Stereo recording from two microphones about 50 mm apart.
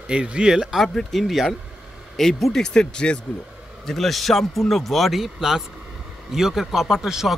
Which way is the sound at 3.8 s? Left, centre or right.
Centre.